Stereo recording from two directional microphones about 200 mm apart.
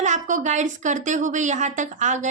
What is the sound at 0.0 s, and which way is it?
A woman's voice, 40° right (ahead or behind).